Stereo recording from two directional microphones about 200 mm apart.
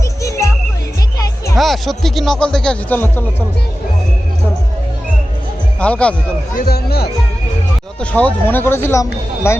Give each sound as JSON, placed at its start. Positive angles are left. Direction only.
{"t": 0.2, "sound": "music", "side_deg": 15}
{"t": 1.5, "sound": "speech", "side_deg": 0}
{"t": 5.8, "sound": "speech", "side_deg": 5}
{"t": 6.6, "sound": "speech", "side_deg": 50}
{"t": 8.1, "sound": "speech", "side_deg": 10}